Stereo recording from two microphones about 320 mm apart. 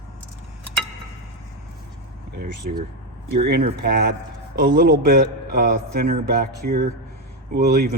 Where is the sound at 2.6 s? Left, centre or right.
Right.